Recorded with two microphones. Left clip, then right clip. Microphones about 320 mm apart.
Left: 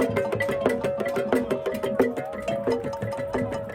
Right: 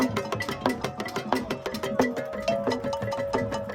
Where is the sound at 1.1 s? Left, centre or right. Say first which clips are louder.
Left 4 dB; right.